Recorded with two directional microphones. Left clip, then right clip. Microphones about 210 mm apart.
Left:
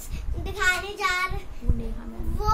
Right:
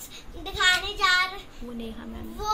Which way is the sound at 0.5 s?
15° left (ahead or behind).